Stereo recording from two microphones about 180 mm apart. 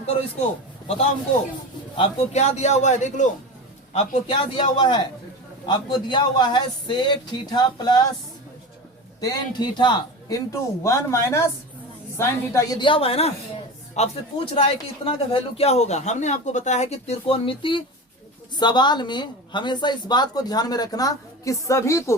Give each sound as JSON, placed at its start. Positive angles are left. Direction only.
{"t": 2.0, "sound": "a man's voice", "side_deg": 35}
{"t": 3.9, "sound": "a woman's voice", "side_deg": 25}
{"t": 9.2, "sound": "a woman's voice", "side_deg": 20}